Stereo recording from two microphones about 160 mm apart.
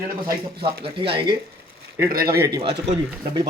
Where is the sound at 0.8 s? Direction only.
30° right (ahead or behind).